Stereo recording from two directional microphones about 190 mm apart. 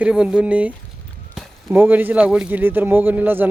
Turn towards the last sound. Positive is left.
turn(degrees=-10)  # may be behind; listen again after turning